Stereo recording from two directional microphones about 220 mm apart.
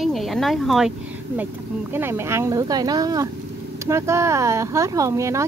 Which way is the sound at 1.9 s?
10° right (ahead or behind).